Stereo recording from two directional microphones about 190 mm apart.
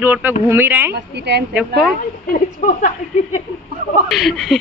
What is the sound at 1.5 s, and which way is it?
Speech, centre (ahead or behind).